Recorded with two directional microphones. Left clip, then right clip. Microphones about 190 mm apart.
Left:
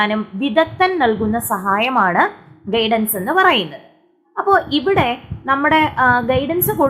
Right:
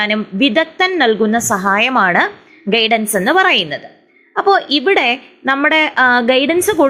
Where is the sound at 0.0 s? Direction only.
15° right (ahead or behind).